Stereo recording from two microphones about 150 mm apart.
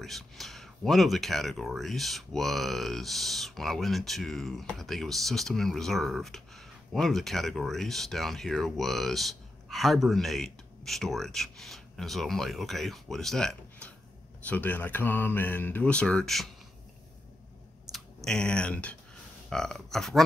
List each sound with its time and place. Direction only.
0.0 s speech: centre (ahead or behind)
17.9 s speech: 5° left (ahead or behind)